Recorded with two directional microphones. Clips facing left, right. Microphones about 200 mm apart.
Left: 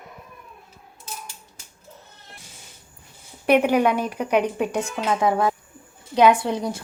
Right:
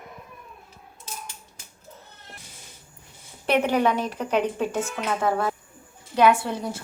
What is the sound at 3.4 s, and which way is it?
Speech, 10° left (ahead or behind).